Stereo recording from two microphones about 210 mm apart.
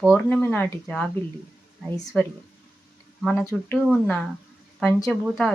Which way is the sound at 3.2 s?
Centre (ahead or behind).